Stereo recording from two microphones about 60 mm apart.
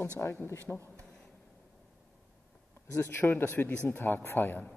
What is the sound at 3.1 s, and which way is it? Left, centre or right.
Speech, left.